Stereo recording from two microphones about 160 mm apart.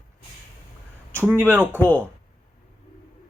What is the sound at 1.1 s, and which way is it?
Speech, 10° right (ahead or behind).